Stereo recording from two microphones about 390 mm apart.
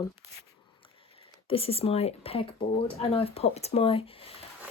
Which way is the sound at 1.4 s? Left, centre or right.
Centre.